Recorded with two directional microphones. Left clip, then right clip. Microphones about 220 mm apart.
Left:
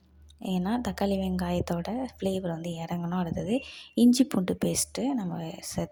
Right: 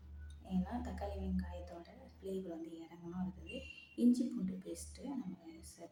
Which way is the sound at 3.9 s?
45° left (ahead or behind).